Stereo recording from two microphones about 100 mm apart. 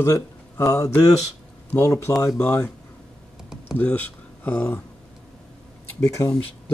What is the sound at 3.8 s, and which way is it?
Speech, 15° left (ahead or behind).